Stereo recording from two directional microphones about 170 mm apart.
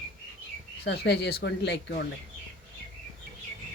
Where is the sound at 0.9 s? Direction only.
80° left.